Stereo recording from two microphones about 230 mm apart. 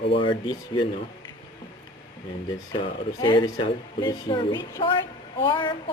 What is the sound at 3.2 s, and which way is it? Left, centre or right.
A woman's voice, centre.